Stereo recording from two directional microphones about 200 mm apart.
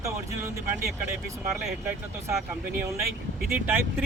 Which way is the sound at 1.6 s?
10° right (ahead or behind).